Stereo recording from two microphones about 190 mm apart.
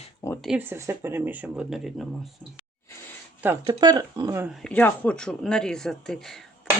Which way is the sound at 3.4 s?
20° right (ahead or behind).